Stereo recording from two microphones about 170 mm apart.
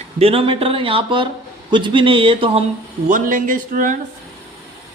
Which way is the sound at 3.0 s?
50° right (ahead or behind).